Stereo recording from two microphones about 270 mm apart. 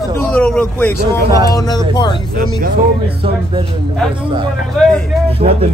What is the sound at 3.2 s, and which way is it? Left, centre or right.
Speech, centre.